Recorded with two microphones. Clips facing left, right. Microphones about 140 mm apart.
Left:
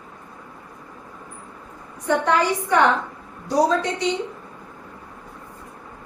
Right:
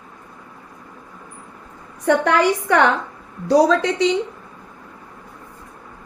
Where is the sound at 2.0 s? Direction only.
75° right (ahead or behind).